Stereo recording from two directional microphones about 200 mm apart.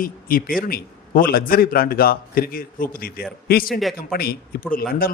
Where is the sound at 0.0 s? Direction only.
45° left (ahead or behind).